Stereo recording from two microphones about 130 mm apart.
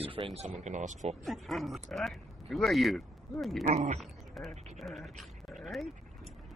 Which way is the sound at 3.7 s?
70° right (ahead or behind).